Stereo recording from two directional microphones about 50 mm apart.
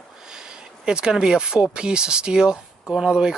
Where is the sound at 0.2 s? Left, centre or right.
Centre.